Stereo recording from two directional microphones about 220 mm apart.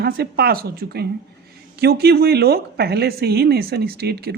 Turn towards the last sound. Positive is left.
turn(degrees=-45)  # may be behind; listen again after turning